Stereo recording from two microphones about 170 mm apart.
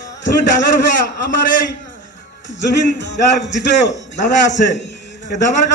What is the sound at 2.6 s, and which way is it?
A man's voice, 90° left.